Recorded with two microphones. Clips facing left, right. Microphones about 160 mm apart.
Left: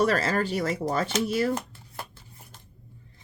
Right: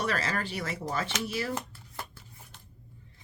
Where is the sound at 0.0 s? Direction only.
40° left (ahead or behind).